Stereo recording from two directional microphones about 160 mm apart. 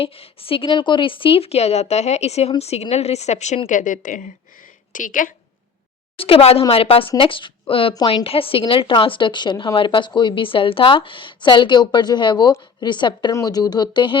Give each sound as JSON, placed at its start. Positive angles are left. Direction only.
{"t": 0.0, "sound": "a woman's voice", "side_deg": 35}
{"t": 6.1, "sound": "a woman's voice", "side_deg": 35}